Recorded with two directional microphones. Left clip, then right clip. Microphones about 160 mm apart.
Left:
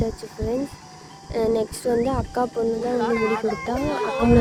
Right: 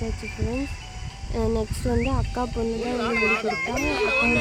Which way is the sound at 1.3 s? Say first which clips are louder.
Left 5 dB; 40° left (ahead or behind).